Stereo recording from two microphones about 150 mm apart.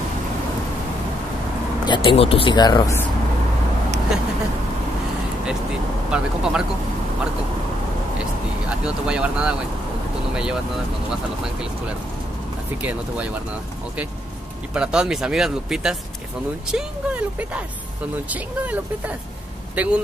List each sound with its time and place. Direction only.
1.9 s speech: 35° left (ahead or behind)
6.0 s speech: 5° right (ahead or behind)
8.2 s vehicle: 5° right (ahead or behind)
10.3 s speech: 5° right (ahead or behind)
12.8 s speech: 10° right (ahead or behind)
14.7 s speech: 5° right (ahead or behind)